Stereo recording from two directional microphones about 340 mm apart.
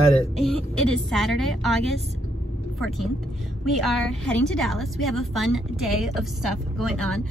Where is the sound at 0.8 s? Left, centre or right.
Centre.